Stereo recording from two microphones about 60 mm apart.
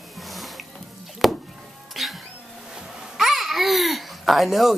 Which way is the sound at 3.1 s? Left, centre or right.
Centre.